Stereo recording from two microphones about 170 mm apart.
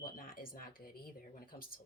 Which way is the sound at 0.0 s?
55° left (ahead or behind).